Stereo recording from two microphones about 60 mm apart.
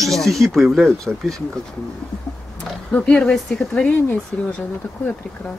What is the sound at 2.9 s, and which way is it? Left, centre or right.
Speech, left.